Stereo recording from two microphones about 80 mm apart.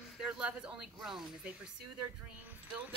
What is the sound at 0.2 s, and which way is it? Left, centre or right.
Speech, centre.